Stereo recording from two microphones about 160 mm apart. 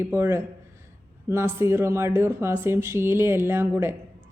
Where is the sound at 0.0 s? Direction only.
15° right (ahead or behind).